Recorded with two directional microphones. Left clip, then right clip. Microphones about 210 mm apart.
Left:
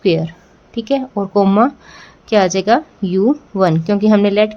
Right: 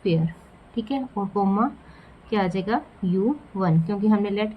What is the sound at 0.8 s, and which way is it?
A woman's voice, 45° left (ahead or behind).